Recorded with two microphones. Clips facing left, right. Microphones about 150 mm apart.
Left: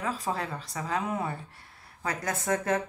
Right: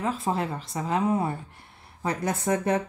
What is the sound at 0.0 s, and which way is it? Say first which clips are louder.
Speech: right 4 dB; 25° right (ahead or behind).